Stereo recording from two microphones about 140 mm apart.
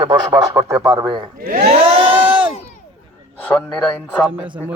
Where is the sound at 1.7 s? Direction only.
35° right (ahead or behind).